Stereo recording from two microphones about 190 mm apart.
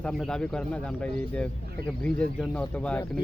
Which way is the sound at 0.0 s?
Centre (ahead or behind).